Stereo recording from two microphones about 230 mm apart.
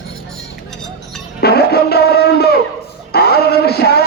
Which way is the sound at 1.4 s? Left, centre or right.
Left.